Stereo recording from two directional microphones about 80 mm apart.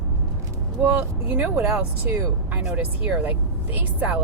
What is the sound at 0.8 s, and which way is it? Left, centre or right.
Speech, right.